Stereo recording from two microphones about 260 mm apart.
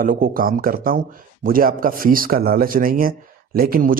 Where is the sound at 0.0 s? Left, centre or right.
Right.